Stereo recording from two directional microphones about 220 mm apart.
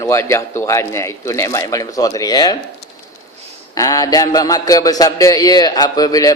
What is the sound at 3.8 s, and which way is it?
Speech, 15° left (ahead or behind).